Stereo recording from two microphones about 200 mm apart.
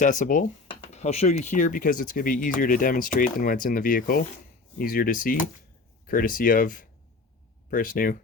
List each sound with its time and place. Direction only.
0.0 s speech: 40° left (ahead or behind)
0.7 s speech: 30° left (ahead or behind); by 8.2 s 45° left (ahead or behind)